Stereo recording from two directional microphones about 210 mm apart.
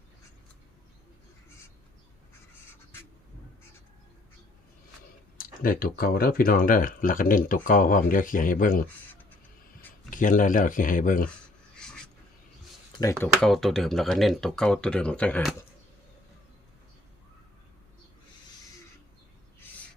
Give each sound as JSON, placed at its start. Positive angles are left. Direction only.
{"t": 5.4, "sound": "speech", "side_deg": 45}
{"t": 10.1, "sound": "speech", "side_deg": 40}
{"t": 11.8, "sound": "duck", "side_deg": 5}
{"t": 13.2, "sound": "speech", "side_deg": 0}